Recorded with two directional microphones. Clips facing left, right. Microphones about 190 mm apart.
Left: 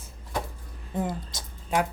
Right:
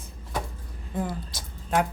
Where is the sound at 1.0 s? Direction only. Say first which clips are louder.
Left 1 dB; 20° left (ahead or behind).